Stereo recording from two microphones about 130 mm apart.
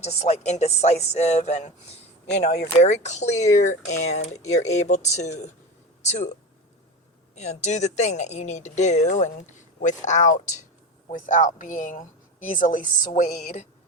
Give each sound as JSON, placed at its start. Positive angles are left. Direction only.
{"t": 0.0, "sound": "speech", "side_deg": 55}
{"t": 7.3, "sound": "speech", "side_deg": 60}
{"t": 11.1, "sound": "speech", "side_deg": 80}